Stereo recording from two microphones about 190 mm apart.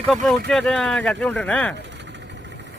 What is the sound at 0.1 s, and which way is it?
Speech, centre (ahead or behind).